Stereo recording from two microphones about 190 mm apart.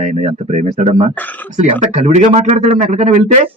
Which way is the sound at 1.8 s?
35° right (ahead or behind).